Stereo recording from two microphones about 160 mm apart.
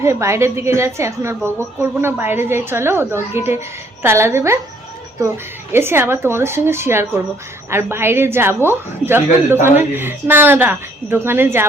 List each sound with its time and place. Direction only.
0.0 s a woman's voice: 15° right (ahead or behind)
5.7 s a woman's voice: 15° right (ahead or behind)